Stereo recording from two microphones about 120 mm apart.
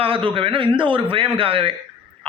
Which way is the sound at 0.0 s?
50° right (ahead or behind).